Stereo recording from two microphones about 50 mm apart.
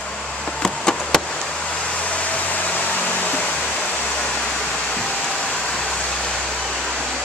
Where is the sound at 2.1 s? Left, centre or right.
Left.